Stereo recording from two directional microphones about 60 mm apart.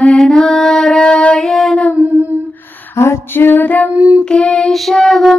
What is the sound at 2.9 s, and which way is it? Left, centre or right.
Mantra, left.